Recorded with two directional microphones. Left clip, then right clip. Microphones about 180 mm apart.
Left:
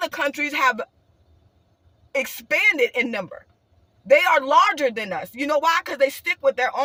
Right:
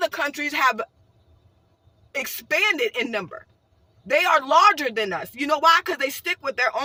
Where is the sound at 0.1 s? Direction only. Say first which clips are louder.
Left 2 dB; 15° left (ahead or behind).